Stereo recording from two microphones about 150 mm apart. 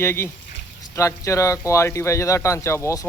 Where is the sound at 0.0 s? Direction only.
15° left (ahead or behind).